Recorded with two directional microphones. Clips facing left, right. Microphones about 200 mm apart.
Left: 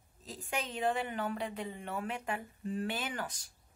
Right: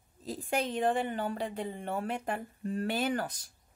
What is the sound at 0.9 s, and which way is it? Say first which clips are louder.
Speech: right 3 dB; 30° right (ahead or behind).